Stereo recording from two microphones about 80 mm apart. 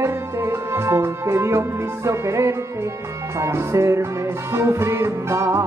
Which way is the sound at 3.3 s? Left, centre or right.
Right.